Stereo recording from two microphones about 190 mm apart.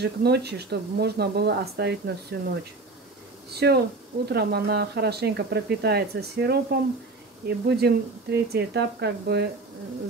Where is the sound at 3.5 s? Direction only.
60° right (ahead or behind).